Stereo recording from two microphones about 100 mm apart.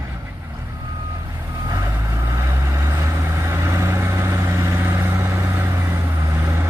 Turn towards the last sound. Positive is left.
turn(degrees=-25)  # may be behind; listen again after turning